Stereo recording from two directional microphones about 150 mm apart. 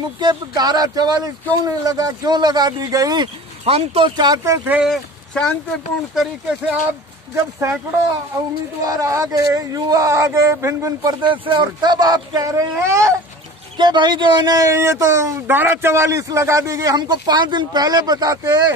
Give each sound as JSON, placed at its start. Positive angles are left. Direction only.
{"t": 0.2, "sound": "speech", "side_deg": -30}
{"t": 3.6, "sound": "speech", "side_deg": -40}
{"t": 4.2, "sound": "speech", "side_deg": -25}
{"t": 4.6, "sound": "speech", "side_deg": -10}
{"t": 4.9, "sound": "speech", "side_deg": 5}
{"t": 6.1, "sound": "speech", "side_deg": -5}
{"t": 7.3, "sound": "speech", "side_deg": -20}
{"t": 8.8, "sound": "speech", "side_deg": -25}
{"t": 13.7, "sound": "speech", "side_deg": -30}